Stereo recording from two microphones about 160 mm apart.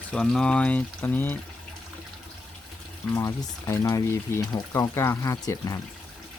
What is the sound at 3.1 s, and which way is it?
Speech, 20° left (ahead or behind).